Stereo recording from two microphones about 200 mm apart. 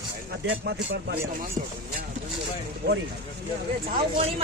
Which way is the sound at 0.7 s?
50° right (ahead or behind).